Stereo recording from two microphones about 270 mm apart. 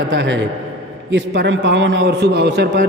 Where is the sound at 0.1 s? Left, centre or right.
Right.